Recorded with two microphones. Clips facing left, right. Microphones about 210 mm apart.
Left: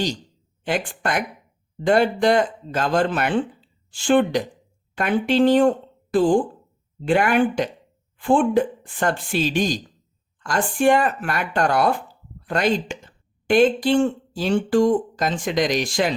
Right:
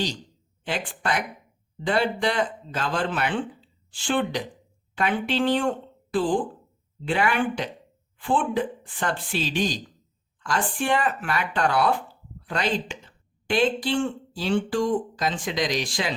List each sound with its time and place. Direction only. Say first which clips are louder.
0.6 s speech: left 5 dB; 45° left (ahead or behind)